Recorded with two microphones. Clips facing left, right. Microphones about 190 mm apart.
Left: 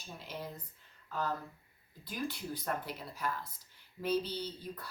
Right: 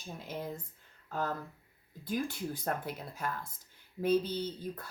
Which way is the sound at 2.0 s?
50° right (ahead or behind).